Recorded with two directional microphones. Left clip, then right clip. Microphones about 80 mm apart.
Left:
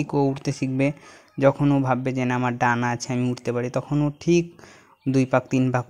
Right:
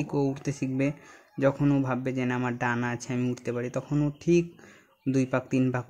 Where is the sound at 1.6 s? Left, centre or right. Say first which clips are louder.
Left 4 dB; centre.